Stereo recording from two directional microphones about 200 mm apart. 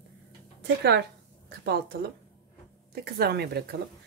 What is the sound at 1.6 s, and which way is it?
Speech, 55° right (ahead or behind).